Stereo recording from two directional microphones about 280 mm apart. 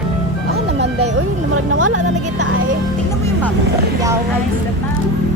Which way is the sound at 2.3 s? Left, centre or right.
Right.